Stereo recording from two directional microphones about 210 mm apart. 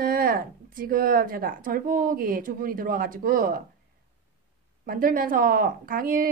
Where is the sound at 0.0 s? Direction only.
45° right (ahead or behind).